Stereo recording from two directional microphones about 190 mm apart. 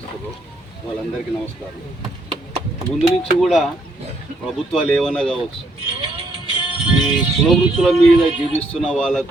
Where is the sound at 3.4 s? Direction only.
Centre (ahead or behind).